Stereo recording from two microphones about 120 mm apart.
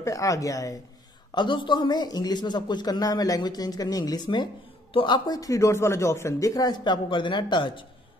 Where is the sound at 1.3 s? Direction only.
40° left (ahead or behind).